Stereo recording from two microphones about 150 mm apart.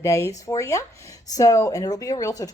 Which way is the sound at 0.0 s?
20° left (ahead or behind).